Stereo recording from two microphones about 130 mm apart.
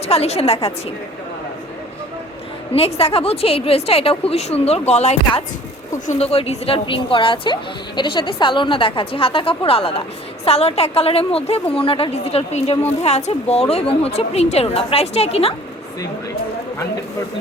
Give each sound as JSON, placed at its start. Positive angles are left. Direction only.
{"t": 0.1, "sound": "a woman's voice", "side_deg": 50}
{"t": 2.7, "sound": "a woman's voice", "side_deg": 50}